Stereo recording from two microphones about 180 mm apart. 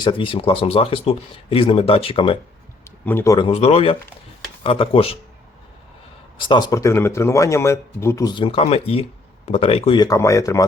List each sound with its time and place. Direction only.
0.0 s speech: 25° left (ahead or behind)
2.8 s a sound: 15° left (ahead or behind)
3.3 s speech: 30° left (ahead or behind)
6.4 s speech: 25° left (ahead or behind)